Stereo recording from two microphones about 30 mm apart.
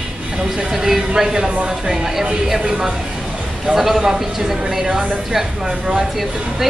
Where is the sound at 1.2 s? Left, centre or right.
Right.